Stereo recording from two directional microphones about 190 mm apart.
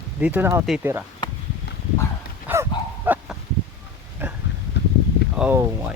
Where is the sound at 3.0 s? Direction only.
5° right (ahead or behind).